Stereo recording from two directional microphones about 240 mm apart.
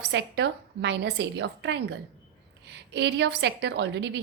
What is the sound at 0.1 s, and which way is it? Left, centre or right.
A woman's voice, right.